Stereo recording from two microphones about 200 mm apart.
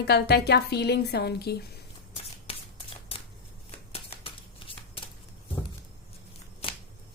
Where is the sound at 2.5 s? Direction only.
30° left (ahead or behind).